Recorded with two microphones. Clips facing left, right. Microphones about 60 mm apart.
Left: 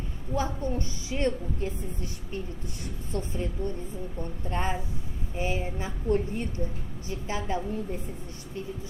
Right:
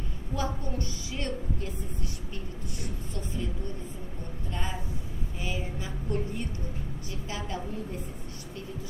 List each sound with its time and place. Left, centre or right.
0.3 s a woman's voice: left
3.1 s speech: left
4.5 s a woman's voice: left